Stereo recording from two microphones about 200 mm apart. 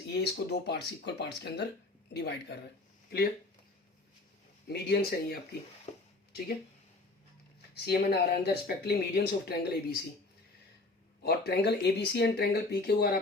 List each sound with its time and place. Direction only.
0.1 s speech: 55° left (ahead or behind)
4.7 s speech: 55° left (ahead or behind)
7.7 s speech: 55° left (ahead or behind)
11.2 s speech: 50° left (ahead or behind)